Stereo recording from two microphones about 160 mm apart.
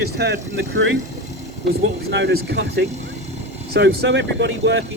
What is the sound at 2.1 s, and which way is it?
Speech, 90° right.